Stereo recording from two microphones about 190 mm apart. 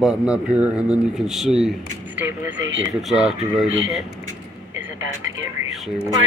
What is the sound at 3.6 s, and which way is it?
Speech, 90° right.